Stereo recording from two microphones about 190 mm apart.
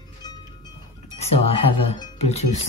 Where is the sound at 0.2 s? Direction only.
20° left (ahead or behind).